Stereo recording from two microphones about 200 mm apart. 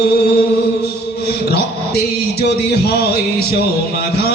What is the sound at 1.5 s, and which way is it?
Mantra, 50° left (ahead or behind).